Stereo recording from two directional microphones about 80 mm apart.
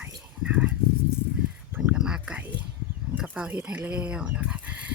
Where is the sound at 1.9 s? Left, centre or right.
Centre.